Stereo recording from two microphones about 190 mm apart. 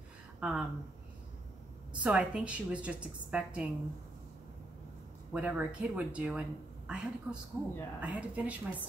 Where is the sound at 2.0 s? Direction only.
5° right (ahead or behind).